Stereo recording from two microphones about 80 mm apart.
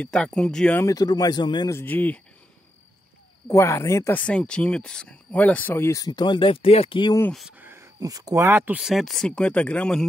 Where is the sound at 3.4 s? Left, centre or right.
Left.